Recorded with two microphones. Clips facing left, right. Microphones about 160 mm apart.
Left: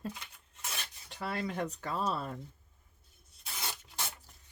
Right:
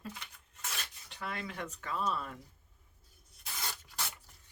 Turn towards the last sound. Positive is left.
turn(degrees=25)  # may be behind; listen again after turning